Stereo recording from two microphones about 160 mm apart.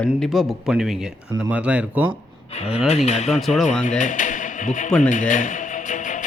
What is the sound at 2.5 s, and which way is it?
Speech, 40° left (ahead or behind).